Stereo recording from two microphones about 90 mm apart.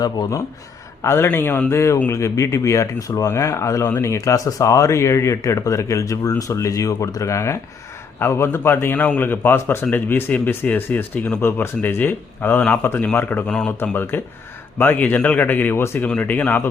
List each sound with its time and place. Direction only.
0.0 s speech: 40° left (ahead or behind)
1.0 s a man's voice: 25° left (ahead or behind)
13.5 s speech: 10° left (ahead or behind)
13.8 s a man's voice: 20° left (ahead or behind)
16.0 s speech: 15° left (ahead or behind)